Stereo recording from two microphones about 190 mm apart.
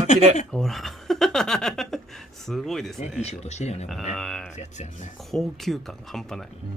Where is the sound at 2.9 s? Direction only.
35° left (ahead or behind).